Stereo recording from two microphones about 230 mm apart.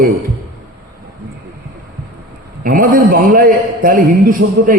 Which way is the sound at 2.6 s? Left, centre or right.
Right.